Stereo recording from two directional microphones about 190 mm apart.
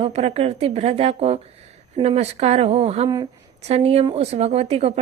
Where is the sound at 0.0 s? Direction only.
35° right (ahead or behind).